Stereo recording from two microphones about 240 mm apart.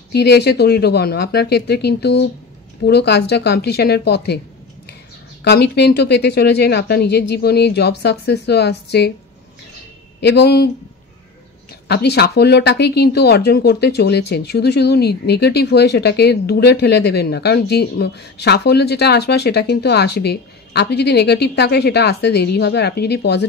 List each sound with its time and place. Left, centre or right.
0.1 s speech: left
5.4 s speech: left
10.2 s speech: left
11.9 s speech: left